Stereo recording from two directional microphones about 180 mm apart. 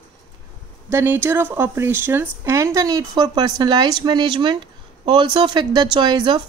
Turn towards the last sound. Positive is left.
turn(degrees=-25)  # may be behind; listen again after turning